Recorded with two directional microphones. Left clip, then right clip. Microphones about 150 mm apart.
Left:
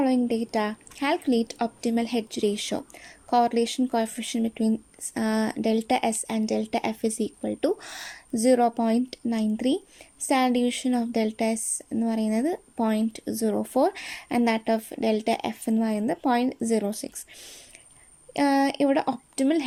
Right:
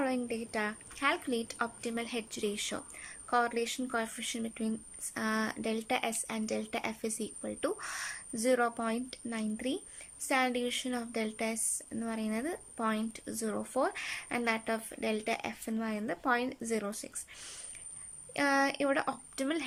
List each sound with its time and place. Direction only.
0.0 s speech: 30° left (ahead or behind)